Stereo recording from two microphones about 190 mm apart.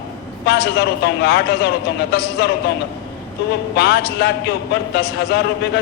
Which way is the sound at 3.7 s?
60° left (ahead or behind).